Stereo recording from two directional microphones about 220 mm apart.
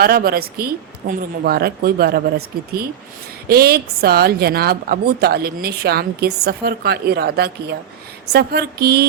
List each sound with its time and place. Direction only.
0.0 s a woman's voice: 45° right (ahead or behind)
3.5 s a woman's voice: 45° right (ahead or behind)